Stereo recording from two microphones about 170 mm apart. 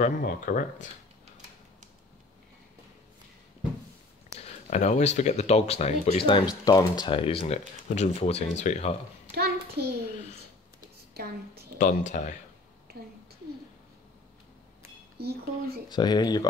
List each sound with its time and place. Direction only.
0.0 s speech: 55° left (ahead or behind)
4.4 s speech: 40° left (ahead or behind)
9.3 s a sound: 65° right (ahead or behind)
11.8 s speech: 45° left (ahead or behind)
12.9 s a sound: 65° right (ahead or behind)
15.1 s speech: 70° right (ahead or behind)
15.9 s speech: 25° left (ahead or behind)